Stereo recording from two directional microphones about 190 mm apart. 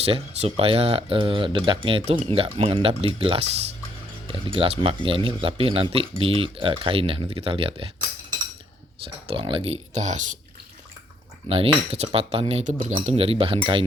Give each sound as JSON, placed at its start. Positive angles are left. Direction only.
{"t": 0.0, "sound": "speech", "side_deg": -30}
{"t": 9.2, "sound": "speech", "side_deg": -25}
{"t": 11.4, "sound": "speech", "side_deg": -30}